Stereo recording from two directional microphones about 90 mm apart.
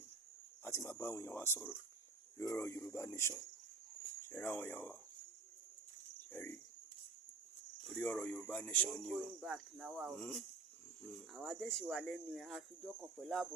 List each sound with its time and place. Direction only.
0.6 s speech: 30° left (ahead or behind)
6.3 s speech: 20° left (ahead or behind)
7.9 s speech: 15° left (ahead or behind)
8.9 s speech: 5° left (ahead or behind)